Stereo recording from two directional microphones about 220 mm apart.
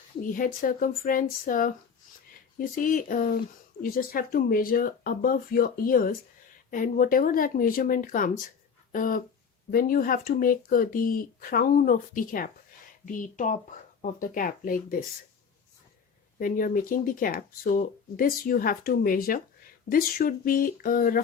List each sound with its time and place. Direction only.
0.2 s speech: 40° left (ahead or behind)
16.4 s speech: 40° left (ahead or behind)